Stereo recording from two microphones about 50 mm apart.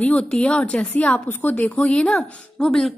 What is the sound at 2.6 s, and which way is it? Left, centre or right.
Speech, centre.